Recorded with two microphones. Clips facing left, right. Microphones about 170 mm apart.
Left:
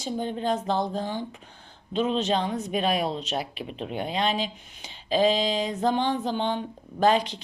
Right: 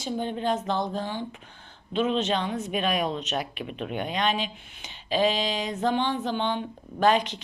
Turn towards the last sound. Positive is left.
turn(degrees=35)  # may be behind; listen again after turning